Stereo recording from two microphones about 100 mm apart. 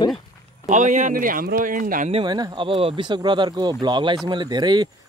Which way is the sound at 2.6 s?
65° right (ahead or behind).